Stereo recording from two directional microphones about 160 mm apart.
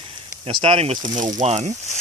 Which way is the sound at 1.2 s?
50° right (ahead or behind).